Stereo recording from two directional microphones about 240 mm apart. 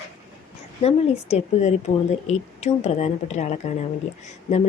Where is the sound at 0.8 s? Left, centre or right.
Left.